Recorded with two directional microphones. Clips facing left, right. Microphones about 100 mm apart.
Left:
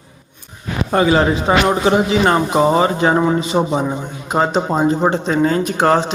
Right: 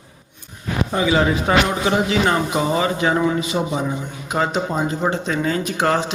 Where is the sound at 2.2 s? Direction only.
45° left (ahead or behind).